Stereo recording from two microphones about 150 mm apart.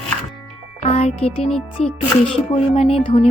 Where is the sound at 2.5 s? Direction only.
45° left (ahead or behind).